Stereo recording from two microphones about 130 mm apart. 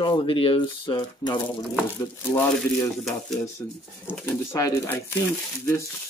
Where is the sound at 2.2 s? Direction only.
20° left (ahead or behind).